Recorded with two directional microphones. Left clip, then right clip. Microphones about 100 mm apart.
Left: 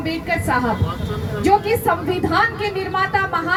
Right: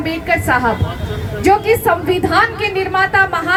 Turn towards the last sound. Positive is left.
turn(degrees=-30)  # may be behind; listen again after turning